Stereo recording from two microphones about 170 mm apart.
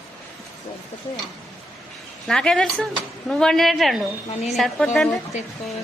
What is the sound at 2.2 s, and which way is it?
Speech, 5° left (ahead or behind).